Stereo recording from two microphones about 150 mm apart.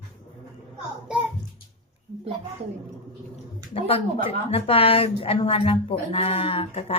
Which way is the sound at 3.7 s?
40° left (ahead or behind).